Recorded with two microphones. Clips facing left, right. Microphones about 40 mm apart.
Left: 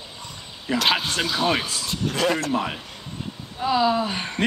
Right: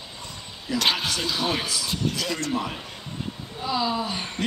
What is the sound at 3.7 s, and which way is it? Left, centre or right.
Speech, left.